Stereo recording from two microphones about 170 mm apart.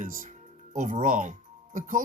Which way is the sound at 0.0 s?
50° right (ahead or behind).